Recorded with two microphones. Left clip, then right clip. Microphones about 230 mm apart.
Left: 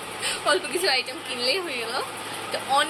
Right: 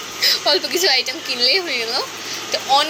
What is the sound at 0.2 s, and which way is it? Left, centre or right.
A woman's voice, centre.